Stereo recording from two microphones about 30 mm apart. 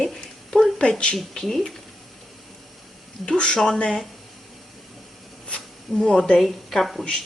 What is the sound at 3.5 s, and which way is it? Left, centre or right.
Speech, left.